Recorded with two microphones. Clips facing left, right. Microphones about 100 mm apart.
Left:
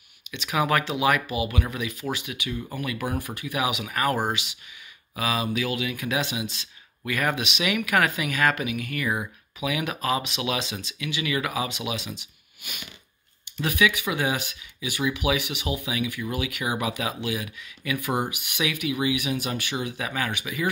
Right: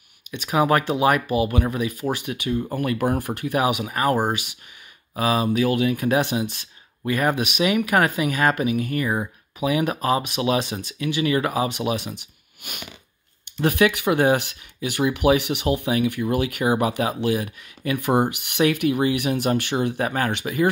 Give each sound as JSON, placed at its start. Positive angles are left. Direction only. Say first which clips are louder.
{"t": 0.3, "sound": "speech", "louder": "right 5 dB", "side_deg": -35}
{"t": 2.1, "sound": "speech", "louder": "right 7 dB", "side_deg": -50}
{"t": 3.2, "sound": "speech", "louder": "right 6 dB", "side_deg": -55}
{"t": 3.6, "sound": "speech", "louder": "right 2 dB", "side_deg": -35}
{"t": 10.6, "sound": "speech", "louder": "right 6 dB", "side_deg": -50}
{"t": 11.8, "sound": "speech", "louder": "right 7 dB", "side_deg": -50}
{"t": 12.6, "sound": "speech", "louder": "right 4 dB", "side_deg": -60}
{"t": 13.7, "sound": "speech", "louder": "right 5 dB", "side_deg": -50}